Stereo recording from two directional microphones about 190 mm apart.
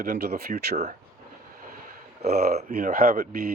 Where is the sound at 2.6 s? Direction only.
40° right (ahead or behind).